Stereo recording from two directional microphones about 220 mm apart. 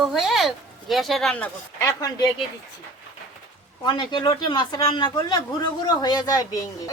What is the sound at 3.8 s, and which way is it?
A woman's voice, 20° left (ahead or behind).